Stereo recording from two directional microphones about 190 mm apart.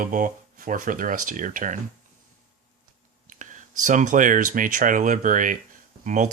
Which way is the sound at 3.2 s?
40° right (ahead or behind).